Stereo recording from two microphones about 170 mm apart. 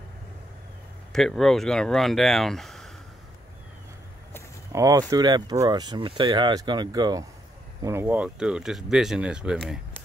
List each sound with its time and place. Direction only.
1.1 s speech: centre (ahead or behind)
4.7 s speech: 20° right (ahead or behind); by 9.8 s 5° right (ahead or behind)